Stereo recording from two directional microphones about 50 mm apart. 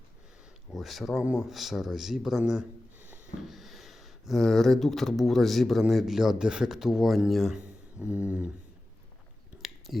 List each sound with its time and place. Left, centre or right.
0.7 s speech: centre
1.2 s speech: right
1.5 s speech: centre
3.4 s speech: centre
7.6 s a sound: right
9.6 s a sound: centre